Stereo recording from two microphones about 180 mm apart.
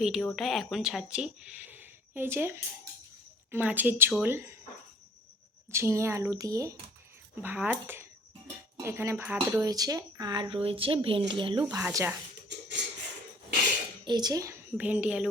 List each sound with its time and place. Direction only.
0.0 s speech: centre (ahead or behind)
1.7 s a sound: 10° right (ahead or behind)
3.5 s a woman's voice: 10° right (ahead or behind)
5.7 s a woman's voice: 15° right (ahead or behind)
11.8 s a woman's voice: 15° right (ahead or behind)
12.5 s a sound: 75° right (ahead or behind)
14.0 s a woman's voice: 25° right (ahead or behind); by 15.3 s 5° right (ahead or behind)